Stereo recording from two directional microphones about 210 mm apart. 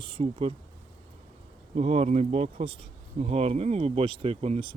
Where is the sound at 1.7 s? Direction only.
30° right (ahead or behind).